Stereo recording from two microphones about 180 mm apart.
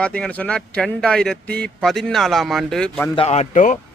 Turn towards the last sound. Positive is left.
turn(degrees=45)  # may be behind; listen again after turning